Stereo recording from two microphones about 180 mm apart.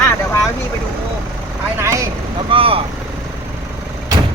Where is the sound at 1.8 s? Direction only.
15° right (ahead or behind).